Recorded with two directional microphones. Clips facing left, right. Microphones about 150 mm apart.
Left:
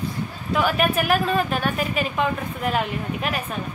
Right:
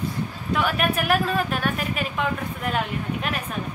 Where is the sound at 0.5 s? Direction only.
Centre (ahead or behind).